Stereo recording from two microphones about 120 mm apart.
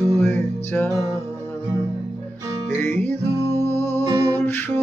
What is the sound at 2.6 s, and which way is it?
Music, 15° left (ahead or behind).